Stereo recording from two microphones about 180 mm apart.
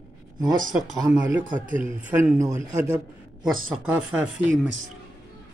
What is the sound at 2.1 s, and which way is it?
Speech, 15° right (ahead or behind).